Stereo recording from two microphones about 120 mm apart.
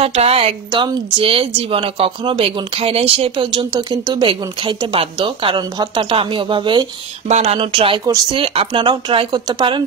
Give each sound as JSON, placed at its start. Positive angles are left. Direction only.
{"t": 0.0, "sound": "speech", "side_deg": -55}
{"t": 0.7, "sound": "speech", "side_deg": -45}
{"t": 7.2, "sound": "speech", "side_deg": -65}
{"t": 7.5, "sound": "speech", "side_deg": -45}